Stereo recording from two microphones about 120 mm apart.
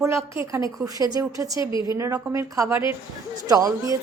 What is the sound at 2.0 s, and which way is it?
Speech, 25° right (ahead or behind).